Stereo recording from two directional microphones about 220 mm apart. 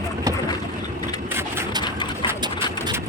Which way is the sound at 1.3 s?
10° right (ahead or behind).